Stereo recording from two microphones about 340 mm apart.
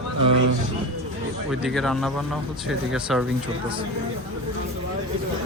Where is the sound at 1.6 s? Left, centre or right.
Centre.